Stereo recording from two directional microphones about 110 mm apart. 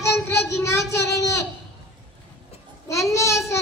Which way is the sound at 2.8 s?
30° left (ahead or behind).